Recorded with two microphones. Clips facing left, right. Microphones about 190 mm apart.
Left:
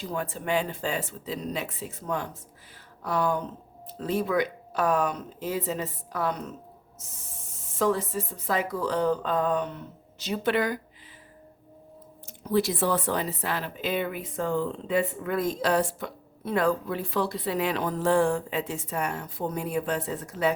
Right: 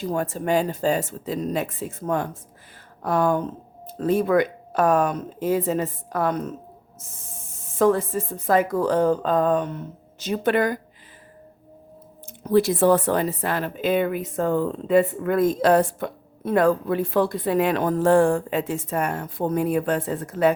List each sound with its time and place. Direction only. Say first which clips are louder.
0.0 s speech: right 7 dB; 45° right (ahead or behind)
7.8 s speech: right 6 dB; 50° right (ahead or behind)
12.4 s speech: right 7 dB; 50° right (ahead or behind)